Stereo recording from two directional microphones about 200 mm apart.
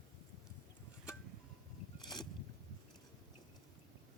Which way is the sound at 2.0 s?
20° left (ahead or behind).